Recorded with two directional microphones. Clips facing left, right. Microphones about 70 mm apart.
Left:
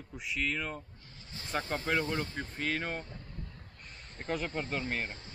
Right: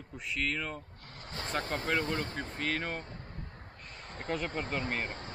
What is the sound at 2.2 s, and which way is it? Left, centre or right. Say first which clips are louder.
Speech: right 1 dB; right.